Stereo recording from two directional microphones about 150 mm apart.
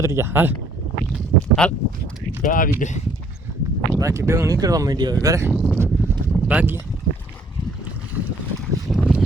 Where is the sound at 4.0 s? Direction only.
20° right (ahead or behind).